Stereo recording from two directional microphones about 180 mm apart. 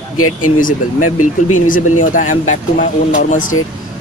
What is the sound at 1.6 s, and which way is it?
Speech, 50° left (ahead or behind).